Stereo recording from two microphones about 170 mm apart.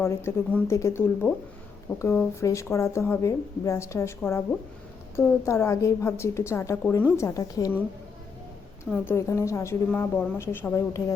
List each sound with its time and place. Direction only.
0.0 s a woman's voice: 15° left (ahead or behind)
8.8 s speech: 15° left (ahead or behind)